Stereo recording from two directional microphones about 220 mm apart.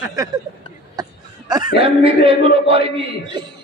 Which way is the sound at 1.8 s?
25° right (ahead or behind).